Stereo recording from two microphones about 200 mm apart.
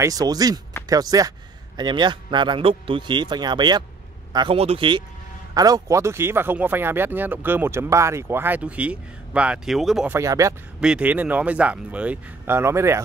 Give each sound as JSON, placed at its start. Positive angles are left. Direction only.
{"t": 0.0, "sound": "speech", "side_deg": -20}
{"t": 10.1, "sound": "speech", "side_deg": -15}
{"t": 10.8, "sound": "speech", "side_deg": -5}